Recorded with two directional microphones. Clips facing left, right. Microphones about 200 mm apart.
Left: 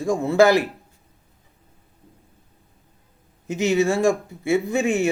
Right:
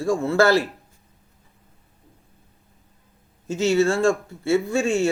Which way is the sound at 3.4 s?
15° left (ahead or behind).